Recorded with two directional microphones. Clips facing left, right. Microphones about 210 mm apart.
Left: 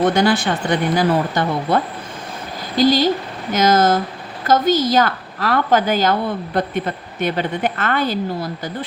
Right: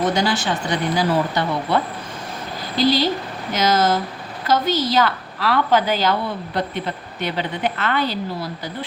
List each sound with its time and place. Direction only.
0.0 s a woman's voice: 55° left (ahead or behind)